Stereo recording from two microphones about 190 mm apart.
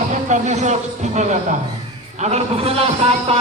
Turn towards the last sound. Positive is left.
turn(degrees=-30)  # may be behind; listen again after turning